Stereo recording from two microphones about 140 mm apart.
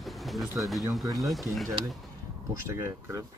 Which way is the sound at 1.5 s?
Centre (ahead or behind).